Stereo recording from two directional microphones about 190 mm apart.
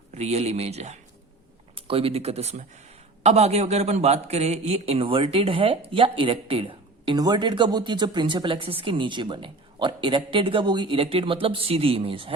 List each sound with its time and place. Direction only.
0.1 s a man's voice: 35° right (ahead or behind)